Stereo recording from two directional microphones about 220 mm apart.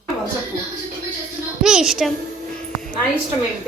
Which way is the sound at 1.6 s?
Centre (ahead or behind).